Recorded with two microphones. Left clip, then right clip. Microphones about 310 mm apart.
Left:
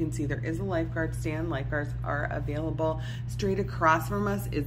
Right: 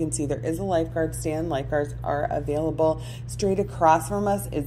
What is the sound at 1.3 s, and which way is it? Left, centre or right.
Speech, centre.